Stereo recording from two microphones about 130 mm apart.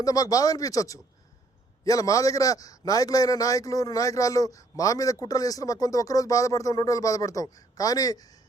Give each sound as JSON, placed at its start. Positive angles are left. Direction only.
{"t": 0.0, "sound": "a man's voice", "side_deg": 25}